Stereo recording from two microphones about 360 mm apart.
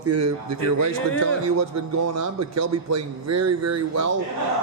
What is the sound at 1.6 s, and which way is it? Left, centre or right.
A man's voice, right.